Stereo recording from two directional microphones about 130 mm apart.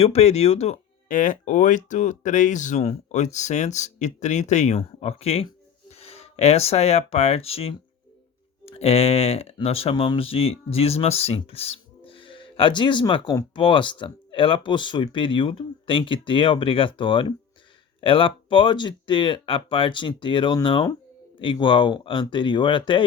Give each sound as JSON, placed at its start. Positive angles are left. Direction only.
{"t": 0.0, "sound": "speech", "side_deg": 50}
{"t": 1.0, "sound": "speech", "side_deg": 90}